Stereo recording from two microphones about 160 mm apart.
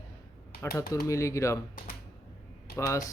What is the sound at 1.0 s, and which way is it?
Speech, 20° left (ahead or behind).